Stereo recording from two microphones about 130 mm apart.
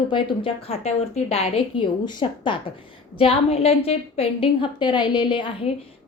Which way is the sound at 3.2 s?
50° left (ahead or behind).